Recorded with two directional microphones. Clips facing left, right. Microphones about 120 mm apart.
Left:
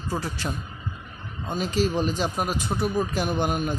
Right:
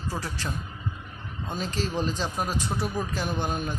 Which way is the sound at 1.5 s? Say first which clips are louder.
Left 6 dB; 10° left (ahead or behind).